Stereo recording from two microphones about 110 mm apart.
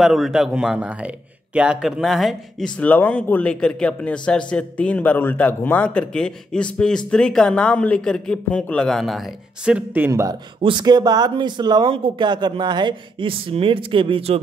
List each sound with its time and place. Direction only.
0.0 s speech: centre (ahead or behind)
2.8 s a man's voice: 15° left (ahead or behind)
9.8 s speech: 20° right (ahead or behind)
10.6 s speech: 45° right (ahead or behind); by 14.4 s 60° right (ahead or behind)